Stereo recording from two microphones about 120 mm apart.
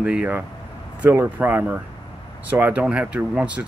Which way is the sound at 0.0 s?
10° right (ahead or behind).